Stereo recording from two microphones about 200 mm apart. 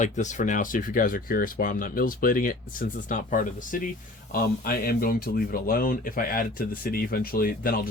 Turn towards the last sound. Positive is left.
turn(degrees=45)  # may be behind; listen again after turning